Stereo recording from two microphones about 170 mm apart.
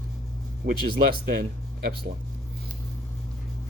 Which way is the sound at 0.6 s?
65° right (ahead or behind).